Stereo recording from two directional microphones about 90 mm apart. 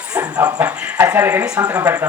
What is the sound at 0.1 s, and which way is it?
A woman's voice, 15° right (ahead or behind).